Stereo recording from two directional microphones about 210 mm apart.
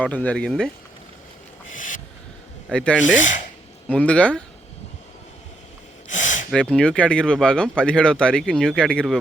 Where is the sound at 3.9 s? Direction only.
5° left (ahead or behind).